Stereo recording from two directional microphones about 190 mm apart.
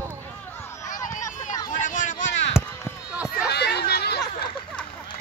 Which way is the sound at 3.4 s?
60° left (ahead or behind).